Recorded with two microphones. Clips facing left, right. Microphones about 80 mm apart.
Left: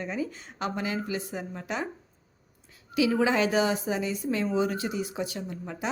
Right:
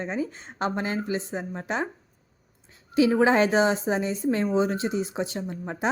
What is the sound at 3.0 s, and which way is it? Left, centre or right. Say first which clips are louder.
Speech: right 4 dB; right.